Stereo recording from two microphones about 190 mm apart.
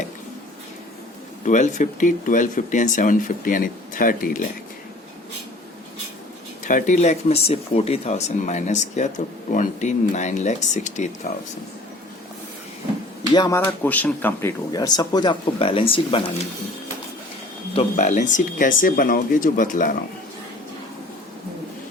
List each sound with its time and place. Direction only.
1.5 s speech: 40° left (ahead or behind)
6.7 s speech: 40° left (ahead or behind)
13.3 s speech: 20° left (ahead or behind)
13.6 s speech: 10° left (ahead or behind)
14.7 s speech: 20° left (ahead or behind)
17.7 s speech: 40° left (ahead or behind)